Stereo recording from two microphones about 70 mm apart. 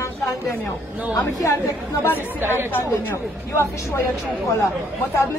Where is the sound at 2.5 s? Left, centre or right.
Left.